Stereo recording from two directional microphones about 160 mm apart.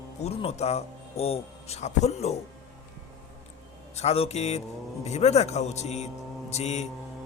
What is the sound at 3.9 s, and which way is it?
Speech, 40° left (ahead or behind).